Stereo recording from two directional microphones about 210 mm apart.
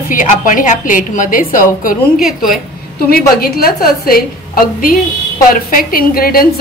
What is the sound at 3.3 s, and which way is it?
A woman's voice, 45° left (ahead or behind).